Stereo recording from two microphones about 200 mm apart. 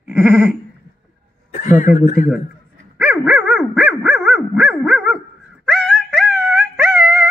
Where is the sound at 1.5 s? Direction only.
40° left (ahead or behind).